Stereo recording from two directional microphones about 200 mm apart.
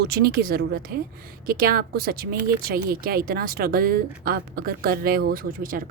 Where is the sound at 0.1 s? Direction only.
50° right (ahead or behind).